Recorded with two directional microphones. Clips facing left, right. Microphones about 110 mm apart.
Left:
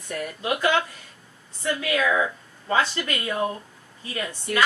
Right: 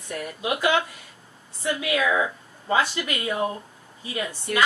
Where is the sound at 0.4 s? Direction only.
15° right (ahead or behind).